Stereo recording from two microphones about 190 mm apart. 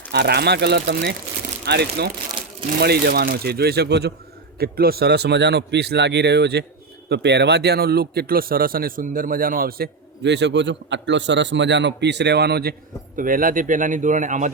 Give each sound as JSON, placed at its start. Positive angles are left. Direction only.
{"t": 0.1, "sound": "speech", "side_deg": -60}
{"t": 13.1, "sound": "speech", "side_deg": -45}